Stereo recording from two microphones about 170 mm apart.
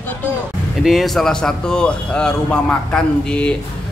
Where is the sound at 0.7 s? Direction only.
Centre (ahead or behind).